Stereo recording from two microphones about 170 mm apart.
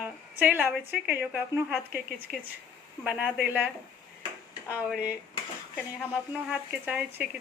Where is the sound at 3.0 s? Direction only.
5° right (ahead or behind).